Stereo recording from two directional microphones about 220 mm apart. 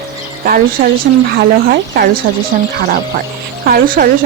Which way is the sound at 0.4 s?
40° right (ahead or behind).